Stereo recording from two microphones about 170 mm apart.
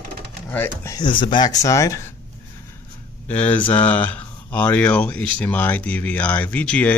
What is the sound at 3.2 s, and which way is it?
Speech, 10° left (ahead or behind).